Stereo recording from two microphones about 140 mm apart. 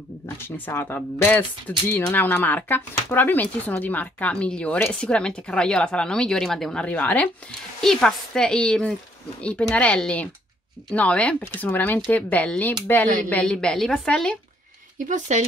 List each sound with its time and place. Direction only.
0.7 s a woman's voice: 15° left (ahead or behind)
15.0 s speech: 60° right (ahead or behind)